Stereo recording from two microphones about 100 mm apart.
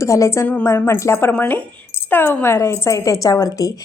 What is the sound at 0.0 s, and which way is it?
Speech, 30° left (ahead or behind).